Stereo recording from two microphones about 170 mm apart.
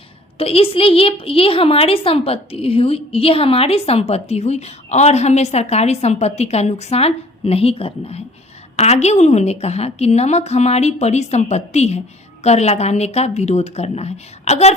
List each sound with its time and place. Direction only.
0.3 s a woman's voice: 35° left (ahead or behind)